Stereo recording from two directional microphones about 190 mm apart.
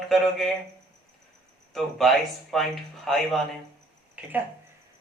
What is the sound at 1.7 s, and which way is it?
Speech, centre (ahead or behind).